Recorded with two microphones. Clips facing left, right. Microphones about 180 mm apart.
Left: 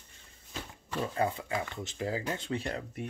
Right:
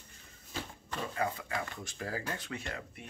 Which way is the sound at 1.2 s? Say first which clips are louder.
Left 3 dB; 25° left (ahead or behind).